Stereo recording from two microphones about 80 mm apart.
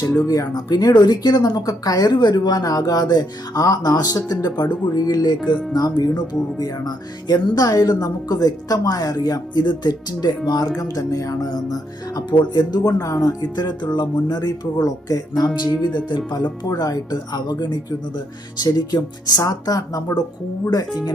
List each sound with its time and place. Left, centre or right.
0.3 s speech: left
12.3 s speech: left
15.8 s speech: left